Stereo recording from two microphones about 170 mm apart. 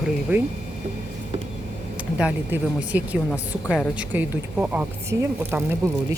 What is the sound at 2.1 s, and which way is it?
Speech, 5° right (ahead or behind).